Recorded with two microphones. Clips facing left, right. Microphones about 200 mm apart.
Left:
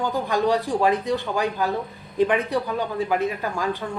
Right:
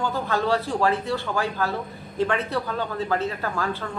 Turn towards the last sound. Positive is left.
turn(degrees=15)  # may be behind; listen again after turning